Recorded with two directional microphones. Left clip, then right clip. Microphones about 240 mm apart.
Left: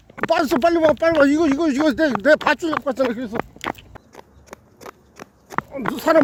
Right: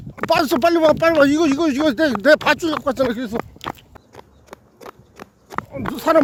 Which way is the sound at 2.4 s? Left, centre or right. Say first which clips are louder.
Right 1 dB; right.